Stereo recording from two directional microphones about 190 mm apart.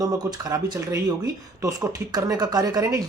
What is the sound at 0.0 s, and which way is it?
Speech, 20° right (ahead or behind).